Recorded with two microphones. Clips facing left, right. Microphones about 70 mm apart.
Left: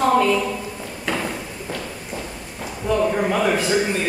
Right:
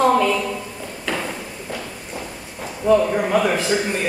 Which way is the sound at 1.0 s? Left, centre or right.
Centre.